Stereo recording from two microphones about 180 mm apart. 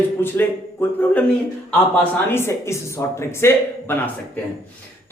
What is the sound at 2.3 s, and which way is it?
A man's voice, 15° left (ahead or behind).